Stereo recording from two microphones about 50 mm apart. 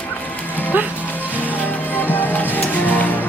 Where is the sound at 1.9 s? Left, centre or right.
Left.